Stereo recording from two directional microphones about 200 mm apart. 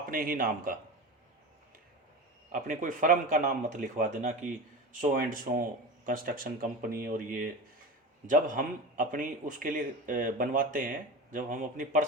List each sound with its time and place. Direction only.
0.1 s speech: 45° right (ahead or behind)
2.5 s a man's voice: 40° right (ahead or behind)
8.3 s a man's voice: 40° right (ahead or behind)